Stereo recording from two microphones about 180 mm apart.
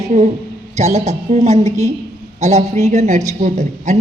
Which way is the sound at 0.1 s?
40° right (ahead or behind).